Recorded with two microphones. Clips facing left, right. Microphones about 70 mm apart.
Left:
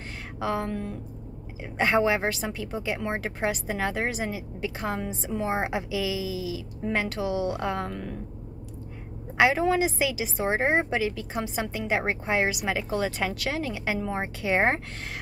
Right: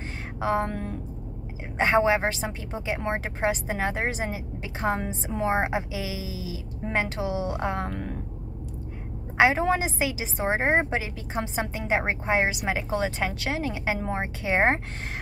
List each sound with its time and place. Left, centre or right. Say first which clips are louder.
0.4 s a woman's voice: right 3 dB; right
1.8 s a woman's voice: right 2 dB; right
5.5 s a woman's voice: right 3 dB; right
9.4 s a woman's voice: even; right